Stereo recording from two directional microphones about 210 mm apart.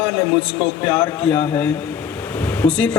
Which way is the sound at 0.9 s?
10° left (ahead or behind).